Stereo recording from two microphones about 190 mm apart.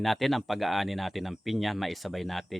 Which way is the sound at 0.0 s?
Centre (ahead or behind).